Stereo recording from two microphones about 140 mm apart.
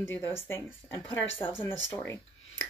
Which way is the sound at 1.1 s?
40° left (ahead or behind).